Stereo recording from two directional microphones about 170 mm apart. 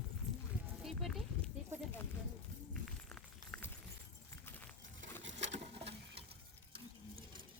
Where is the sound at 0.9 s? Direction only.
Centre (ahead or behind).